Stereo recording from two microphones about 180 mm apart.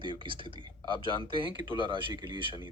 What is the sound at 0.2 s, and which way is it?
Speech, 25° right (ahead or behind).